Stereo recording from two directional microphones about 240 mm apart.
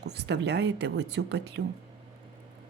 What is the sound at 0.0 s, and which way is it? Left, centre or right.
Speech, right.